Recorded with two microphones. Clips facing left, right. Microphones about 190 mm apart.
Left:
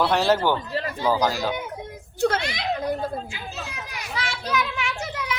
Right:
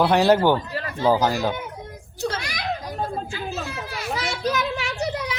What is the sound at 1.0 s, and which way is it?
Speech, 15° right (ahead or behind).